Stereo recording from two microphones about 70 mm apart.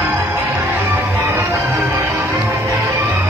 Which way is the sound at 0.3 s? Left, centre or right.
Right.